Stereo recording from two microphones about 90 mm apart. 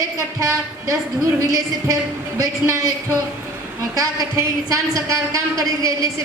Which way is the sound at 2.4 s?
35° right (ahead or behind).